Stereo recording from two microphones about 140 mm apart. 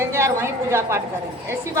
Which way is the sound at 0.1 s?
20° right (ahead or behind).